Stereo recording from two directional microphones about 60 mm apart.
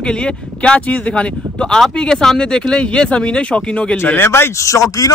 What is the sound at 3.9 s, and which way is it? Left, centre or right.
Speech, left.